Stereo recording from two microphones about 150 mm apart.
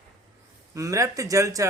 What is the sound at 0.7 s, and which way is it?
Speech, 20° right (ahead or behind).